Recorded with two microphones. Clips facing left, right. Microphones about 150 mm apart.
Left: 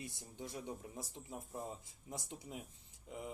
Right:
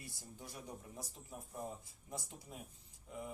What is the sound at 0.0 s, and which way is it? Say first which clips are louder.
Speech: left 5 dB; 20° left (ahead or behind).